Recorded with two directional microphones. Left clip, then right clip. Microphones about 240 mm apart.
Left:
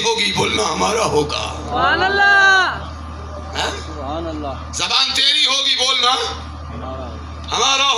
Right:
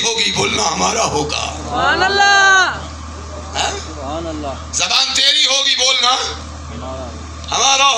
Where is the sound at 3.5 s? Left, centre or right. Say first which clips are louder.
Right 3 dB; centre.